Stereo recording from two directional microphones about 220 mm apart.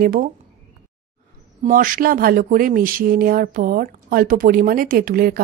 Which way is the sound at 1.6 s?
40° right (ahead or behind).